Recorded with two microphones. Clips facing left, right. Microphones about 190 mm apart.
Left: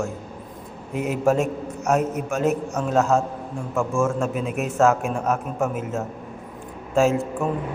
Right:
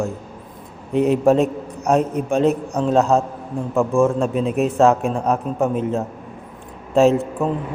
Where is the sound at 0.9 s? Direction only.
35° right (ahead or behind).